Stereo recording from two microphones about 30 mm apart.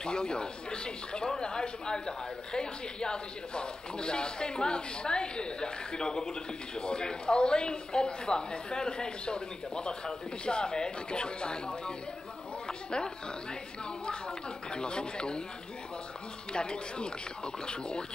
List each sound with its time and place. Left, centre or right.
0.0 s speech: left
12.6 s a sound: left
14.7 s speech: left
16.5 s speech: left